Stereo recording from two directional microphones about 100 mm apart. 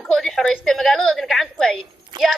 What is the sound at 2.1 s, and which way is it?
Speech, 50° right (ahead or behind).